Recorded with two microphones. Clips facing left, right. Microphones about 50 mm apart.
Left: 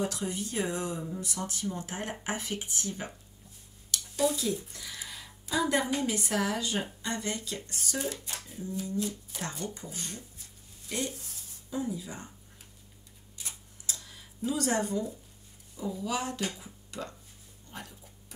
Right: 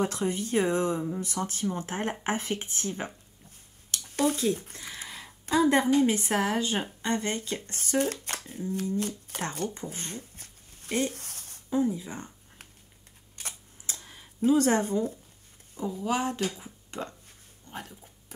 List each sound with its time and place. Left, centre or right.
0.0 s speech: right
3.9 s a sound: right
5.9 s speech: right
8.1 s speech: right
9.8 s speech: right
10.3 s a sound: right
11.7 s speech: right
13.4 s camera: right
15.7 s speech: right
17.6 s a sound: right